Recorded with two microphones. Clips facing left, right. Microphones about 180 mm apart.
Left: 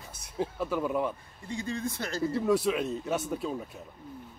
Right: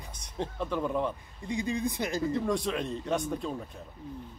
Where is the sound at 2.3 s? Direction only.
5° left (ahead or behind).